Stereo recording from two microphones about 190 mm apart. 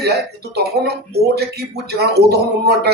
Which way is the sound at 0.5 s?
60° right (ahead or behind).